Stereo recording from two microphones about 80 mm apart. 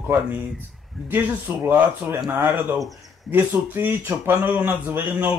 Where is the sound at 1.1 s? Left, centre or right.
Right.